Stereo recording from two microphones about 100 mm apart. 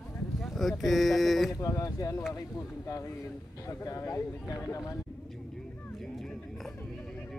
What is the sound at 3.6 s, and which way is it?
Speech, 35° left (ahead or behind).